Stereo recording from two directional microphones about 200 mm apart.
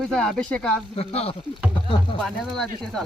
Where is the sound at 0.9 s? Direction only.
30° left (ahead or behind).